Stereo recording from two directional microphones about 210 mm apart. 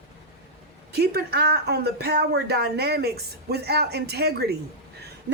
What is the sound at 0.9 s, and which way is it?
Speech, 50° right (ahead or behind).